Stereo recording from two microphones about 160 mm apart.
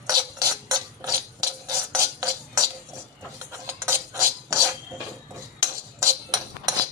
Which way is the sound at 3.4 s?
20° right (ahead or behind).